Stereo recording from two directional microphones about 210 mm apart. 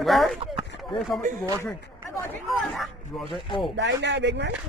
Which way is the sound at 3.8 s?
55° right (ahead or behind).